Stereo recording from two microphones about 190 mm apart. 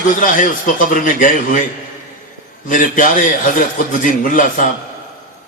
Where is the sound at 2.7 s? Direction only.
45° left (ahead or behind).